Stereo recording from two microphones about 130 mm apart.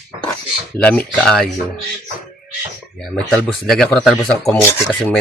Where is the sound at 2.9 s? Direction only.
5° left (ahead or behind).